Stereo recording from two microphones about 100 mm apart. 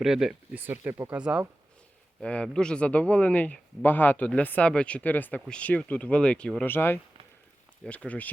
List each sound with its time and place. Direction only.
0.0 s speech: 5° right (ahead or behind)
0.5 s speech: 20° right (ahead or behind)
2.2 s speech: 10° left (ahead or behind)